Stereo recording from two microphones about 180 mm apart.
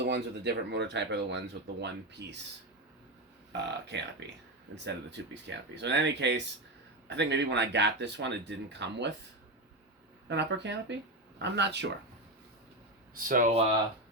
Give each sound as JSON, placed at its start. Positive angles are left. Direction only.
{"t": 0.0, "sound": "speech", "side_deg": -70}
{"t": 3.6, "sound": "speech", "side_deg": -75}
{"t": 10.2, "sound": "speech", "side_deg": -75}
{"t": 13.1, "sound": "speech", "side_deg": -50}